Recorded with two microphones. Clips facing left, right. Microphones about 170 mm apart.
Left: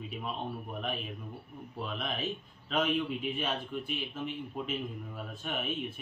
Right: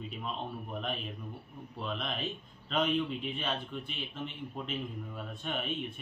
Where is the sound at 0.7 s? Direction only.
5° left (ahead or behind).